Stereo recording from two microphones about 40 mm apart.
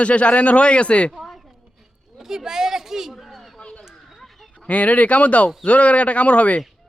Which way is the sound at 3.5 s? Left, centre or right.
Left.